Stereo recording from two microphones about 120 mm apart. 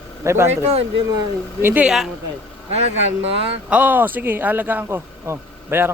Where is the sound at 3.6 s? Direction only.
10° right (ahead or behind).